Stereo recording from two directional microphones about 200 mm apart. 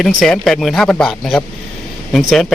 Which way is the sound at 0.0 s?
Centre (ahead or behind).